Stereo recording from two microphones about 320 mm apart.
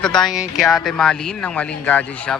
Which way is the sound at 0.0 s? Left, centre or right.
Centre.